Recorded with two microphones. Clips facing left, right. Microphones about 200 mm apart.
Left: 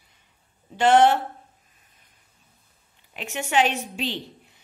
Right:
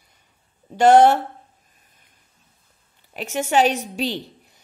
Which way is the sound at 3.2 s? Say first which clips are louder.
Right 4 dB; 40° right (ahead or behind).